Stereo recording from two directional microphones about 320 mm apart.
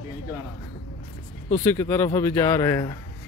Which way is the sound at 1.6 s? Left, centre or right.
Centre.